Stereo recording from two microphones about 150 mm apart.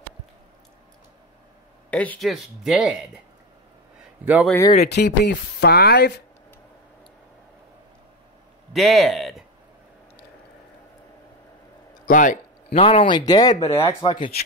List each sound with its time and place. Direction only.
1.9 s speech: 10° left (ahead or behind)
4.2 s speech: 10° right (ahead or behind)
4.7 s speech: 90° left
8.7 s speech: centre (ahead or behind)
12.1 s speech: 60° left (ahead or behind)
12.6 s speech: 40° left (ahead or behind)
13.6 s speech: 40° left (ahead or behind)